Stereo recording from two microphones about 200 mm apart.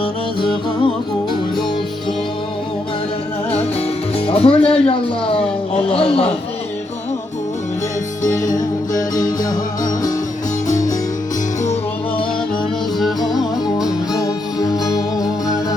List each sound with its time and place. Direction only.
3.5 s music: 30° left (ahead or behind)
4.3 s speech: 30° left (ahead or behind)
8.2 s music: 20° left (ahead or behind)
11.6 s music: 35° left (ahead or behind)
13.0 s music: centre (ahead or behind)
14.2 s music: 15° left (ahead or behind)